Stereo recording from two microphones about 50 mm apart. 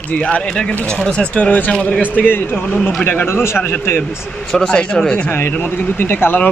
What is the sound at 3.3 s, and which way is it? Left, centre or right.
Speech, left.